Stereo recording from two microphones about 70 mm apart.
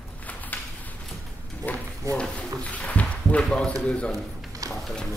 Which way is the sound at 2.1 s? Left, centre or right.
Centre.